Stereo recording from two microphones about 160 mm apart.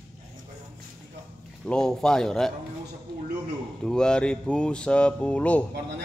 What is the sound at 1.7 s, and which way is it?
Speech, 5° left (ahead or behind).